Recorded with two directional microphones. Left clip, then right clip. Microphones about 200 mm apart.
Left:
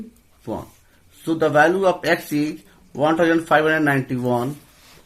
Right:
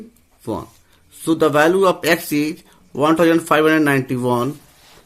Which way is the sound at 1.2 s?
50° right (ahead or behind).